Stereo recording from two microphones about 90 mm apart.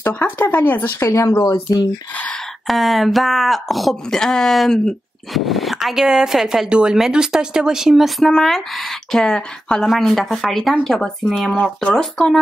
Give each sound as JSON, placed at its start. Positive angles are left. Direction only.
{"t": 0.1, "sound": "speech", "side_deg": 20}
{"t": 0.9, "sound": "speech", "side_deg": 30}
{"t": 2.6, "sound": "speech", "side_deg": 0}